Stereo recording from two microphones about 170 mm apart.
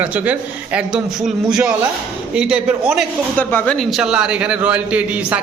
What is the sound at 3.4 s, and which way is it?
A man's voice, 10° left (ahead or behind).